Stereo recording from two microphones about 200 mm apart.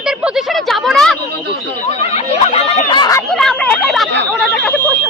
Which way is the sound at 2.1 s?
30° left (ahead or behind).